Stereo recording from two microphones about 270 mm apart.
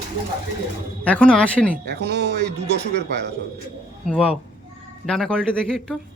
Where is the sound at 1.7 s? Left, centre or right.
Right.